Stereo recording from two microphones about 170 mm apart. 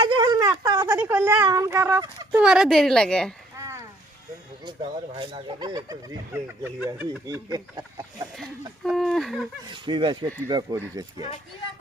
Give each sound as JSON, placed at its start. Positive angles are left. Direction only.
{"t": 0.0, "sound": "a sound", "side_deg": -25}
{"t": 2.4, "sound": "a woman's voice", "side_deg": -5}
{"t": 3.6, "sound": "a sound", "side_deg": -20}
{"t": 4.6, "sound": "speech", "side_deg": -30}
{"t": 7.3, "sound": "speech", "side_deg": -25}
{"t": 8.8, "sound": "speech", "side_deg": 0}
{"t": 9.6, "sound": "speech", "side_deg": -25}